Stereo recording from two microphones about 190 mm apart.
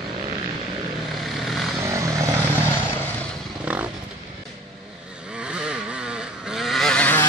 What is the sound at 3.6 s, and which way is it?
Roaring cats, 5° right (ahead or behind).